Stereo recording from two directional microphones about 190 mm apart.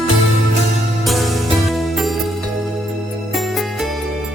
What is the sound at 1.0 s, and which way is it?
Music, centre (ahead or behind).